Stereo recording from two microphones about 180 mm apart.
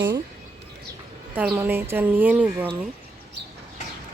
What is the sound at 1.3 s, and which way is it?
Speech, 10° right (ahead or behind).